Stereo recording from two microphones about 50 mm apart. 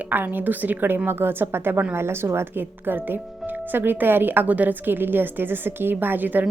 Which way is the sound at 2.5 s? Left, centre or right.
Right.